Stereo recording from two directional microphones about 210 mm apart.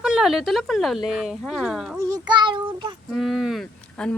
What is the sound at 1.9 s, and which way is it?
Child singing, 20° right (ahead or behind).